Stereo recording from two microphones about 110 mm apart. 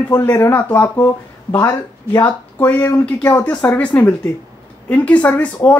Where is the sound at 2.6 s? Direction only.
20° left (ahead or behind).